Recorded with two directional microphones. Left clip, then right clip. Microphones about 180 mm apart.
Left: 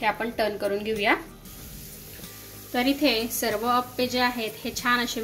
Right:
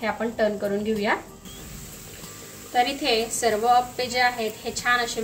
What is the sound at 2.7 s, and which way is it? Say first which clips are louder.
A woman's voice: right 2 dB; 55° left (ahead or behind).